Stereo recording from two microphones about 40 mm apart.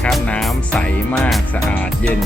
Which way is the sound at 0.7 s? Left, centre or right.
Left.